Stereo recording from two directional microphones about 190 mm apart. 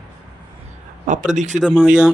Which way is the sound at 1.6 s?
5° right (ahead or behind).